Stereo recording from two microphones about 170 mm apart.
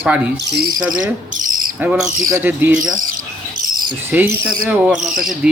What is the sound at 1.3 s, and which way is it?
Cricket, 50° right (ahead or behind).